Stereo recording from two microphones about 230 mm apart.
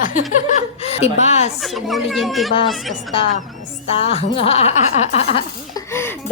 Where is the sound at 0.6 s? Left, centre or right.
Left.